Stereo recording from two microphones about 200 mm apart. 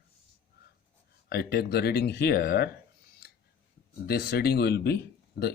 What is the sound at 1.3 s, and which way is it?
Speech, 50° left (ahead or behind).